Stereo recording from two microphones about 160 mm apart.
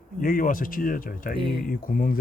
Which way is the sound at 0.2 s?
60° left (ahead or behind).